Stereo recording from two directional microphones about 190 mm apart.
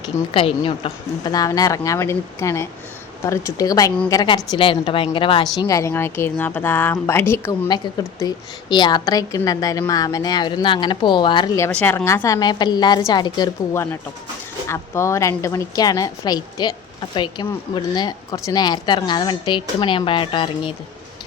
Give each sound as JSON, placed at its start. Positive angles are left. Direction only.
{"t": 0.0, "sound": "a woman's voice", "side_deg": 30}